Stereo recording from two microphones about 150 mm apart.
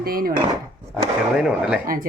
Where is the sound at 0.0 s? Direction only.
80° right.